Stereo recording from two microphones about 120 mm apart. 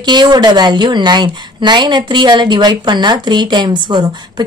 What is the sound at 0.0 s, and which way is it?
Speech, 35° right (ahead or behind).